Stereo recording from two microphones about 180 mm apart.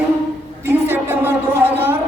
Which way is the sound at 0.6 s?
10° right (ahead or behind).